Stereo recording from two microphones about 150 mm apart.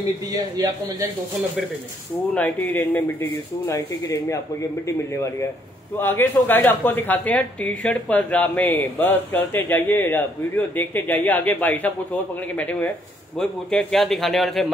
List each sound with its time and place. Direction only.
0.3 s a man's voice: 25° right (ahead or behind)
2.3 s a man's voice: 10° left (ahead or behind)